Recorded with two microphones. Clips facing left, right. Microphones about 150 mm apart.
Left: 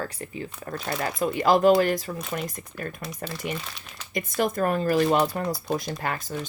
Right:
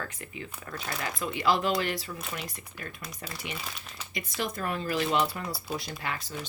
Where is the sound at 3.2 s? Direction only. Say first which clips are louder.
Left 7 dB; centre (ahead or behind).